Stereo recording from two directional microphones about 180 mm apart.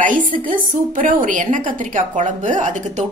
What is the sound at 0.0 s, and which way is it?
A woman's voice, 50° right (ahead or behind).